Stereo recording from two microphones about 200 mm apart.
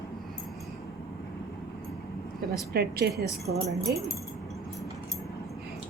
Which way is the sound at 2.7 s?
50° right (ahead or behind).